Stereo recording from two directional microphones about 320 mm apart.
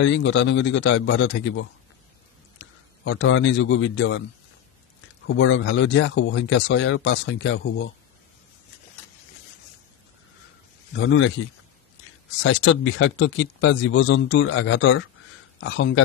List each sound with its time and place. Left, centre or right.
0.0 s a man's voice: left
5.2 s speech: left
11.0 s speech: left
12.4 s speech: left